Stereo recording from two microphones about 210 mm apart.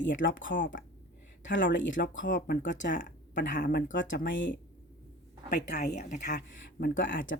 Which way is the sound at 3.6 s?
45° left (ahead or behind).